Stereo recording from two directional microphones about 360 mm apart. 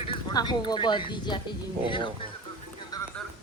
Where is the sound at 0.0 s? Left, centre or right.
Centre.